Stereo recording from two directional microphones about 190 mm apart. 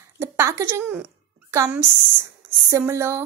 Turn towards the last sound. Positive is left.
turn(degrees=-15)  # may be behind; listen again after turning